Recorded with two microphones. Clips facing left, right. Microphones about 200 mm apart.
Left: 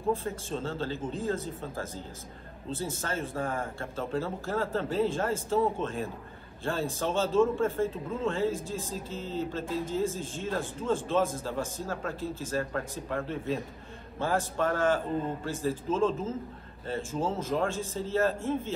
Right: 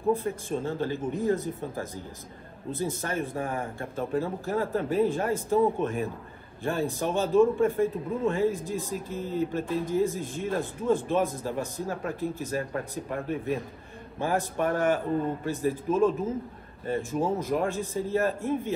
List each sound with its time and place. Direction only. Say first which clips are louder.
0.1 s a man's voice: right 4 dB; 15° right (ahead or behind)